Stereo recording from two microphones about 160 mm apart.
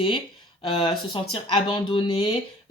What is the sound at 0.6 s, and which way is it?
Speech, 30° left (ahead or behind).